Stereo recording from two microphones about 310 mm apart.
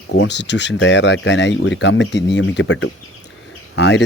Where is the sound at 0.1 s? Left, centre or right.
Left.